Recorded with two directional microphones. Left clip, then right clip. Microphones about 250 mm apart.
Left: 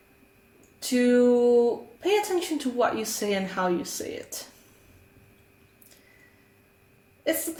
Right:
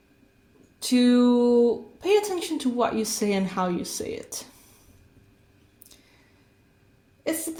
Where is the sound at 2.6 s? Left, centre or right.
Right.